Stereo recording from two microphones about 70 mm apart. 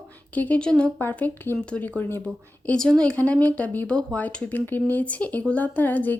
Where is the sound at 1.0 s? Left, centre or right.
Left.